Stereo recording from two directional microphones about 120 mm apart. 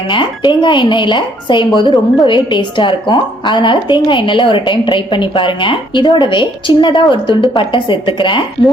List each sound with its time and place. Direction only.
0.1 s speech: 40° left (ahead or behind)